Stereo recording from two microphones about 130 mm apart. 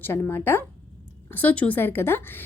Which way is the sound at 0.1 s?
15° left (ahead or behind).